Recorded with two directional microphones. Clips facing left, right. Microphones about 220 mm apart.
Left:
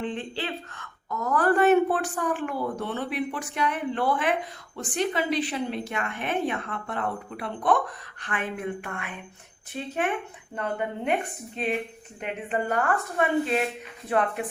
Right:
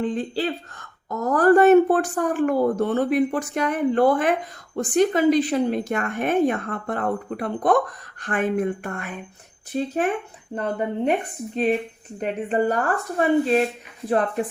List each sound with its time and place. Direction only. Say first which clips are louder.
0.0 s a woman's voice: right 7 dB; 40° right (ahead or behind)
12.2 s speech: right 7 dB; 35° right (ahead or behind)